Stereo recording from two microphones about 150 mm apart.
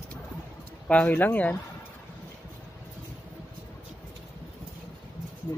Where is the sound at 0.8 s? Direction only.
10° left (ahead or behind).